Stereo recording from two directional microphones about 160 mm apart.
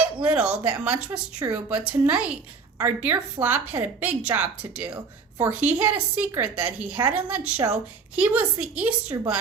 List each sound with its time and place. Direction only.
0.2 s a woman's voice: 10° right (ahead or behind)
1.4 s a woman's voice: 20° right (ahead or behind)
1.8 s a woman's voice: 5° right (ahead or behind)